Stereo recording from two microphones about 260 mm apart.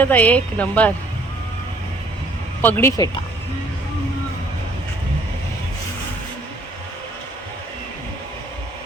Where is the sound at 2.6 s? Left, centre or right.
Centre.